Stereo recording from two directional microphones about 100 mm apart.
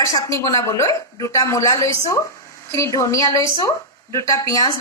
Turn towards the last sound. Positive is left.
turn(degrees=40)  # may be behind; listen again after turning